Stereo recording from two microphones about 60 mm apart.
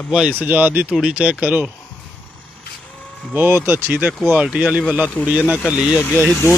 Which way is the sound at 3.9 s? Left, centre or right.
Right.